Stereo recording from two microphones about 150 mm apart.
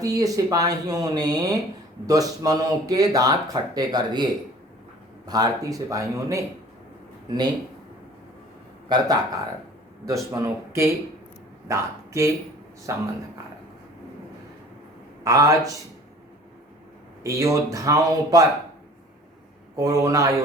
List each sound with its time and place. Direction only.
0.0 s speech: 25° right (ahead or behind)
8.9 s speech: 25° right (ahead or behind)
15.2 s speech: 20° right (ahead or behind)
17.2 s speech: 20° right (ahead or behind)
19.7 s speech: 20° right (ahead or behind)